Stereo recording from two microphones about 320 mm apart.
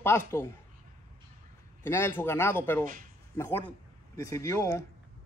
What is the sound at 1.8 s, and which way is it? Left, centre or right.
Speech, centre.